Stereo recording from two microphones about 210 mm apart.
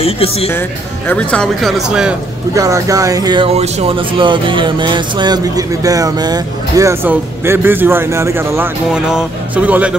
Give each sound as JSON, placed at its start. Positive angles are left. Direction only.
{"t": 0.0, "sound": "speech", "side_deg": 30}
{"t": 0.5, "sound": "speech", "side_deg": 10}
{"t": 2.5, "sound": "speech", "side_deg": -15}
{"t": 3.5, "sound": "speech", "side_deg": -30}